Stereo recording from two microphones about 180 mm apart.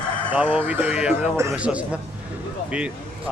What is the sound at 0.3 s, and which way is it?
Speech, 5° right (ahead or behind).